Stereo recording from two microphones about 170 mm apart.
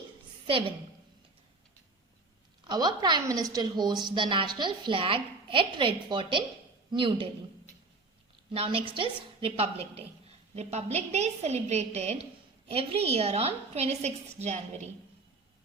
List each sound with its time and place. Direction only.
2.6 s a woman's voice: 25° right (ahead or behind)
8.5 s a woman's voice: 30° right (ahead or behind)